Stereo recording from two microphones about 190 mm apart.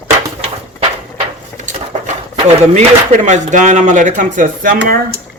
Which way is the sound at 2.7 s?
40° right (ahead or behind).